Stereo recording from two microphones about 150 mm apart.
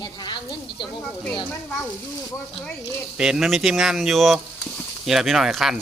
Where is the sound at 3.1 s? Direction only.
5° right (ahead or behind).